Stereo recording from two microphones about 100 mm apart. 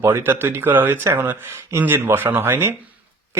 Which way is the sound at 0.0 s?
25° right (ahead or behind).